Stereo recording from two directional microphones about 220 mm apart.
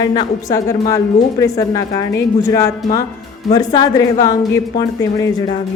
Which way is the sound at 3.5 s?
20° left (ahead or behind).